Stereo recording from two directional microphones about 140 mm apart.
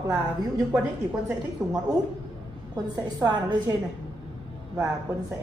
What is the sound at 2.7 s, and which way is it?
A woman's voice, 30° right (ahead or behind).